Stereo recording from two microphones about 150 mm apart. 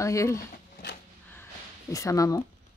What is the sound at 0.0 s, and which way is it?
Speech, 20° left (ahead or behind).